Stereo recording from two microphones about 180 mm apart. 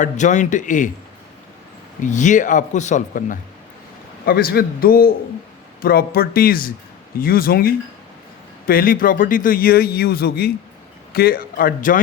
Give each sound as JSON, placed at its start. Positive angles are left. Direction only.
{"t": 0.0, "sound": "a man's voice", "side_deg": 40}
{"t": 2.0, "sound": "a man's voice", "side_deg": 45}
{"t": 4.3, "sound": "a man's voice", "side_deg": 55}